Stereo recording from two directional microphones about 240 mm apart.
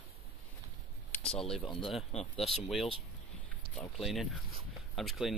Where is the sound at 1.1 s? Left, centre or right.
Centre.